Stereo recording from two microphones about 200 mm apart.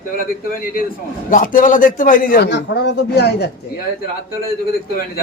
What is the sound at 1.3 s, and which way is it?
A man's voice, 40° left (ahead or behind).